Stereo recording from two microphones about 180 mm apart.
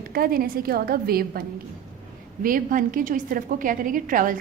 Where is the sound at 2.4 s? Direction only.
50° right (ahead or behind).